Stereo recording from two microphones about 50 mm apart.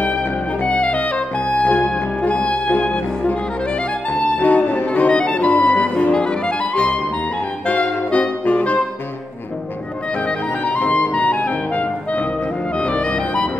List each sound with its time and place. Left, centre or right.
0.7 s music: left
4.4 s music: left
5.1 s clarinet: left
6.1 s music: centre
10.2 s music: left
10.8 s clarinet: left
12.7 s music: left